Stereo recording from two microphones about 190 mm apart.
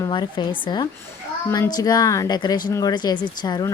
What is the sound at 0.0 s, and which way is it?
Speech, 25° left (ahead or behind).